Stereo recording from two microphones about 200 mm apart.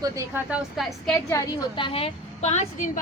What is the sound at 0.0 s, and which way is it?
Speech, 15° right (ahead or behind).